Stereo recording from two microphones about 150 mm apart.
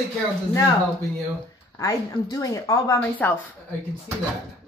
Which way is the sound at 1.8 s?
25° left (ahead or behind).